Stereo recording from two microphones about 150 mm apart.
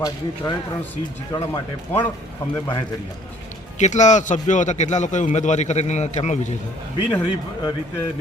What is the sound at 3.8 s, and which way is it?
A man's voice, 50° left (ahead or behind).